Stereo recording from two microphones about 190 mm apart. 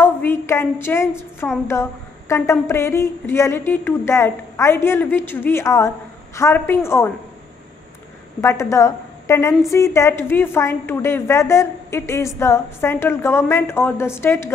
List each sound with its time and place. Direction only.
0.0 s a sound: 10° left (ahead or behind)
1.7 s a woman's voice: 15° left (ahead or behind)
8.4 s a woman's voice: 15° left (ahead or behind)